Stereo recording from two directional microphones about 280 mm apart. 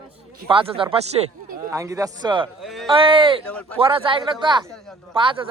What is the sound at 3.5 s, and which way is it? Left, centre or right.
Speech, centre.